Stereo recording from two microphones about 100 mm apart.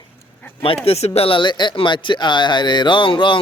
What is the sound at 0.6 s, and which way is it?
A man's voice, 75° left (ahead or behind).